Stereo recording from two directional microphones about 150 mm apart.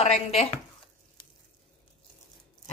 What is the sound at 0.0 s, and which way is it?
Speech, 45° left (ahead or behind).